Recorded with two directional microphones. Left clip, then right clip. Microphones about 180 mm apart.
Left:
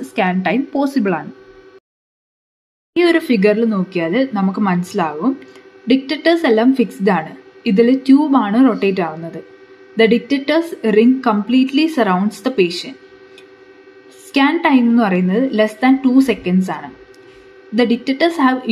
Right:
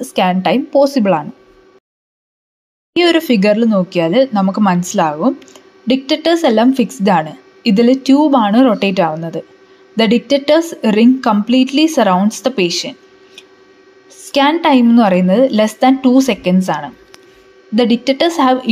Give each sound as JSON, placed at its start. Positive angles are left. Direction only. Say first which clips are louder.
{"t": 0.1, "sound": "a woman's voice", "louder": "right 4 dB", "side_deg": -30}
{"t": 2.9, "sound": "speech", "louder": "right 2 dB", "side_deg": -30}
{"t": 14.3, "sound": "speech", "louder": "right 3 dB", "side_deg": -35}